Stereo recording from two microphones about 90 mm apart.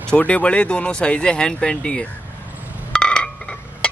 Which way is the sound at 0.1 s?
15° left (ahead or behind).